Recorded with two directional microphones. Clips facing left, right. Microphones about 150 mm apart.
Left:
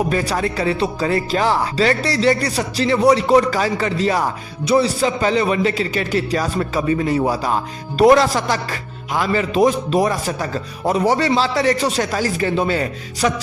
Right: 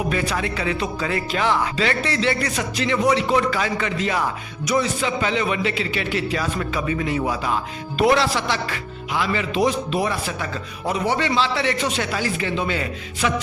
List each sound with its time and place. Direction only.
0.1 s speech: 40° left (ahead or behind)